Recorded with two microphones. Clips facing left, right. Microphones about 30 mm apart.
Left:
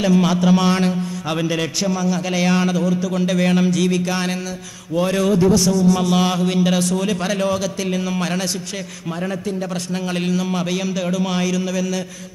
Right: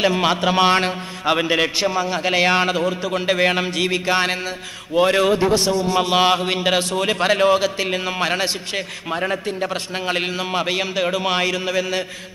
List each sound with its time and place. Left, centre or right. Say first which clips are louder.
0.0 s a man's voice: left 1 dB; right